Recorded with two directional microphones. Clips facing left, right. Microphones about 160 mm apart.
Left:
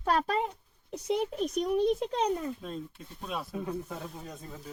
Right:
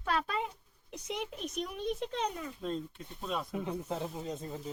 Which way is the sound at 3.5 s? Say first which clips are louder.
Even; 20° right (ahead or behind).